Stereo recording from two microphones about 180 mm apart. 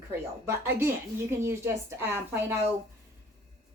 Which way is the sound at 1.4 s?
15° right (ahead or behind).